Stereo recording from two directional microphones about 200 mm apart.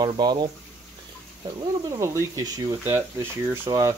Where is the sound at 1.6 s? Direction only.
15° right (ahead or behind).